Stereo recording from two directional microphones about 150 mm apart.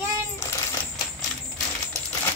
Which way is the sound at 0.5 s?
20° left (ahead or behind).